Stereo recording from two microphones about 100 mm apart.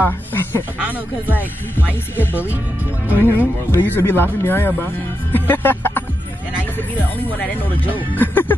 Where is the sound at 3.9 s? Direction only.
20° left (ahead or behind).